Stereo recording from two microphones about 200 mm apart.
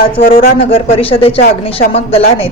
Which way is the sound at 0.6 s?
30° left (ahead or behind).